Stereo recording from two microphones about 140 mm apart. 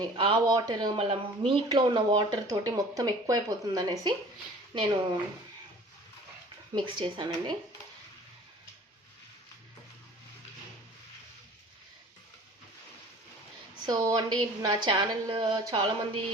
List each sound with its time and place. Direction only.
0.0 s speech: 35° right (ahead or behind)
6.7 s speech: 35° right (ahead or behind)
13.8 s a woman's voice: 25° right (ahead or behind)